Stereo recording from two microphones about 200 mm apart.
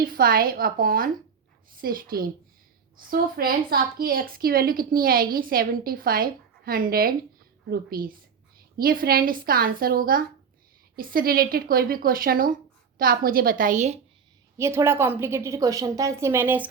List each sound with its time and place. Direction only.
0.0 s a woman's voice: 45° right (ahead or behind)
14.6 s a woman's voice: 15° right (ahead or behind)